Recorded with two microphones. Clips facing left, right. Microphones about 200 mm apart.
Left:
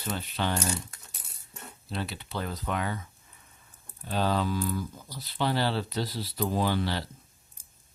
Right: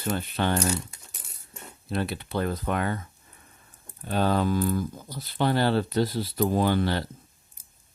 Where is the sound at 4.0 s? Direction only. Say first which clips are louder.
Right 4 dB; 55° right (ahead or behind).